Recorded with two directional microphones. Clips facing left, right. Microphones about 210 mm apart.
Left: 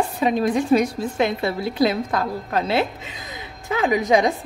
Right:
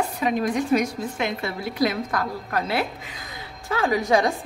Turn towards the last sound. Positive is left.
turn(degrees=20)  # may be behind; listen again after turning